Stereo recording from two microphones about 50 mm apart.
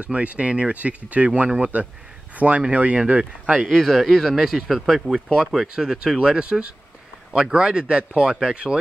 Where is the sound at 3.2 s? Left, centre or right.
Centre.